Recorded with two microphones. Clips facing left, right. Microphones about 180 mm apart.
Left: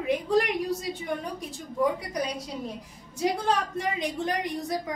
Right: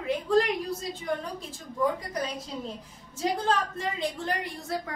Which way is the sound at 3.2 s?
15° left (ahead or behind).